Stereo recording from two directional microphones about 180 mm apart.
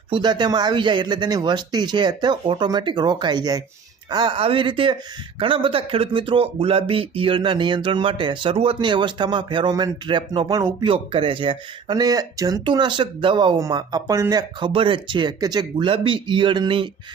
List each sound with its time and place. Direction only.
0.1 s speech: 25° right (ahead or behind)
10.8 s speech: 30° right (ahead or behind)